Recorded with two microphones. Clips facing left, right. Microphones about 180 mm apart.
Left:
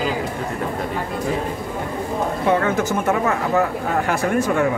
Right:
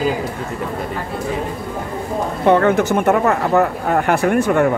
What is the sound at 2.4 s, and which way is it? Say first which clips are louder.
Speech: right 6 dB; 60° right (ahead or behind).